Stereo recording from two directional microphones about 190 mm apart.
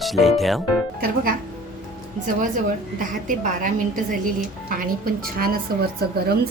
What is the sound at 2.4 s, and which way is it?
A woman's voice, 45° right (ahead or behind).